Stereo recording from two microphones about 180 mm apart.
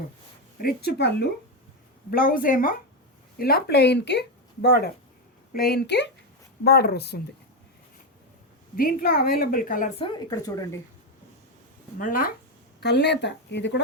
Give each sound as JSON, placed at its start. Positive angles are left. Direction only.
{"t": 0.6, "sound": "speech", "side_deg": 60}
{"t": 2.0, "sound": "a woman's voice", "side_deg": 55}
{"t": 6.7, "sound": "speech", "side_deg": 60}
{"t": 8.7, "sound": "a woman's voice", "side_deg": 50}
{"t": 10.0, "sound": "speech", "side_deg": 20}
{"t": 11.9, "sound": "a woman's voice", "side_deg": 50}
{"t": 12.8, "sound": "speech", "side_deg": 70}